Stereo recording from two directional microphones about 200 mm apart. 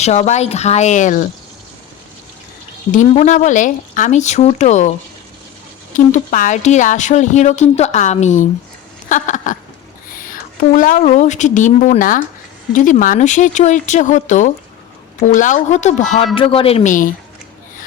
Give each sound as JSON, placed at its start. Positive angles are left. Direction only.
{"t": 0.0, "sound": "speech", "side_deg": 35}
{"t": 2.9, "sound": "speech", "side_deg": 40}
{"t": 6.1, "sound": "speech", "side_deg": 40}
{"t": 9.0, "sound": "a sound", "side_deg": 40}
{"t": 10.8, "sound": "speech", "side_deg": 40}